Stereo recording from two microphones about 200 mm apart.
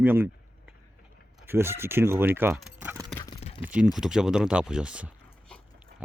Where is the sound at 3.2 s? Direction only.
25° left (ahead or behind).